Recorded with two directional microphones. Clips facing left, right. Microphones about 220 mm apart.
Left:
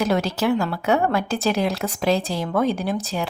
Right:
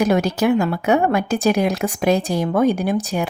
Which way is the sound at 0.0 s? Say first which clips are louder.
Right 4 dB; 15° right (ahead or behind).